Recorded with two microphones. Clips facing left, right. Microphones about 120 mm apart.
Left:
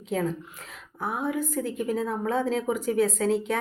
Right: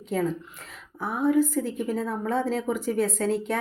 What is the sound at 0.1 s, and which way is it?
Speech, centre (ahead or behind).